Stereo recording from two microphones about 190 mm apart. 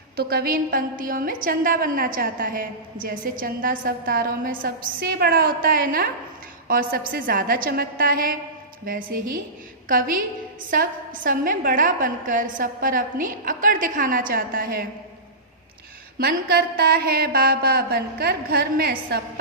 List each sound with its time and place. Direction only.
0.2 s a woman's voice: 55° right (ahead or behind)
10.7 s a woman's voice: 45° right (ahead or behind)
16.1 s a woman's voice: 50° right (ahead or behind)